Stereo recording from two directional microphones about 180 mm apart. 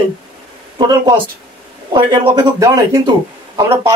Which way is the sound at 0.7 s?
25° right (ahead or behind).